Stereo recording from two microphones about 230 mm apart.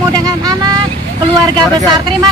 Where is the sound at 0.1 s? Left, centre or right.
Centre.